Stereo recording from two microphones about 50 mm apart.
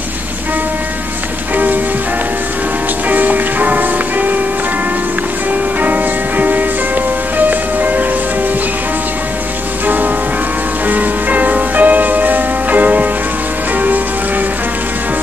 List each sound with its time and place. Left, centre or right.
3.1 s music: right
5.8 s music: right
9.8 s music: right